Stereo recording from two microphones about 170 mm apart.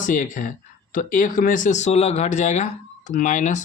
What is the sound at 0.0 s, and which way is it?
Speech, 50° left (ahead or behind).